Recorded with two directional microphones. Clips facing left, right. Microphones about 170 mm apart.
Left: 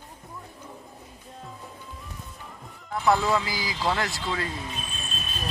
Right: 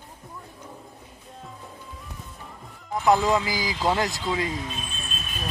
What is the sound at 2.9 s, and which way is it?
Speech, 15° right (ahead or behind).